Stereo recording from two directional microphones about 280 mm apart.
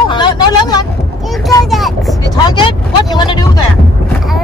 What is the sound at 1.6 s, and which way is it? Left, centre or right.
Speech, centre.